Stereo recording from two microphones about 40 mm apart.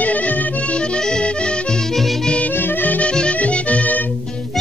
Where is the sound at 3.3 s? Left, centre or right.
Left.